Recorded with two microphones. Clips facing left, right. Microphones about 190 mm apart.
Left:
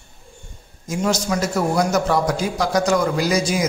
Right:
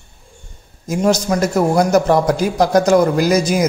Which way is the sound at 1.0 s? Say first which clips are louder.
Right 5 dB; 50° right (ahead or behind).